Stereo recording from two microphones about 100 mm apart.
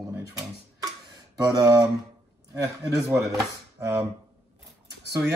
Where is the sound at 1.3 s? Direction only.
40° right (ahead or behind).